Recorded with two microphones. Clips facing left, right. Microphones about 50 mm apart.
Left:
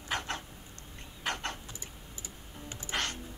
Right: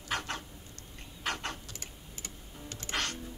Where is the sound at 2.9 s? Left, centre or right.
Centre.